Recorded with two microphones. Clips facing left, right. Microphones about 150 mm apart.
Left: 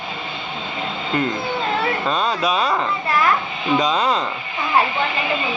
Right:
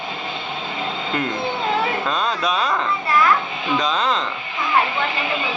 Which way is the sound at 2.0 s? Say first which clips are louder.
Left 2 dB; 5° left (ahead or behind).